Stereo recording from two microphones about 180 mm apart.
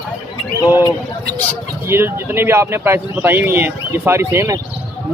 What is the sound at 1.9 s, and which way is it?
Speech, 15° right (ahead or behind).